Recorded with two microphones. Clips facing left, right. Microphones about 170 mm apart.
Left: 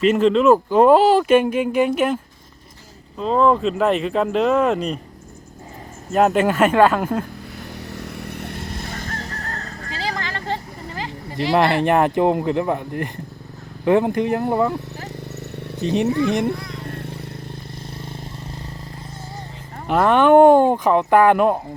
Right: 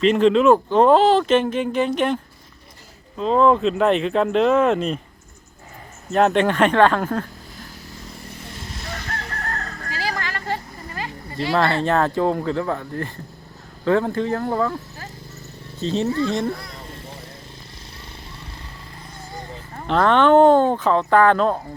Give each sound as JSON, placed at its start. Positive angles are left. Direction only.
{"t": 0.0, "sound": "speech", "side_deg": 5}
{"t": 3.2, "sound": "speech", "side_deg": 0}
{"t": 6.1, "sound": "speech", "side_deg": 5}
{"t": 7.6, "sound": "fowl", "side_deg": 70}
{"t": 9.9, "sound": "a sound", "side_deg": 25}
{"t": 13.8, "sound": "speech", "side_deg": 15}
{"t": 15.0, "sound": "a sound", "side_deg": 70}
{"t": 16.1, "sound": "speech", "side_deg": 15}
{"t": 16.8, "sound": "vehicle", "side_deg": 65}
{"t": 19.9, "sound": "speech", "side_deg": 10}